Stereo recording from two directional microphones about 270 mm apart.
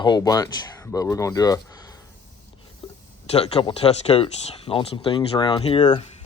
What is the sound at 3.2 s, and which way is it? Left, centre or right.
Speech, left.